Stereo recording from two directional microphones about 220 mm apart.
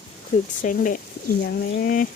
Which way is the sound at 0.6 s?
40° left (ahead or behind).